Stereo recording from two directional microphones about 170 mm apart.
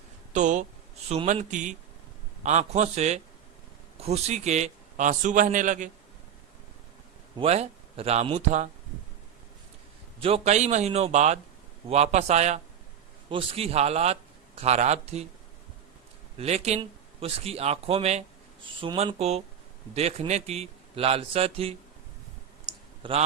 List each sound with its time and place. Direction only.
0.3 s a man's voice: 45° right (ahead or behind)
7.3 s speech: 40° right (ahead or behind)
10.2 s speech: 35° right (ahead or behind)
16.4 s speech: 40° right (ahead or behind)
22.6 s clicking: 30° right (ahead or behind)